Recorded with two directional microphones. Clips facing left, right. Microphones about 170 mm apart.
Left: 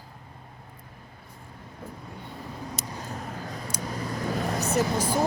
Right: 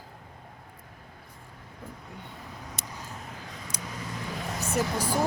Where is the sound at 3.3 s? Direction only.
40° left (ahead or behind).